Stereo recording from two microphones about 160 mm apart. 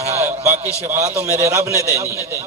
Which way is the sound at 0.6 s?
40° right (ahead or behind).